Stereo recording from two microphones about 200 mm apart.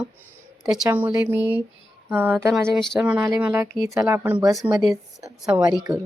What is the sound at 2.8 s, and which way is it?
Speech, centre (ahead or behind).